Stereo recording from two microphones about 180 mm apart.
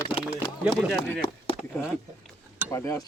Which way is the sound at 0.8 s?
Centre (ahead or behind).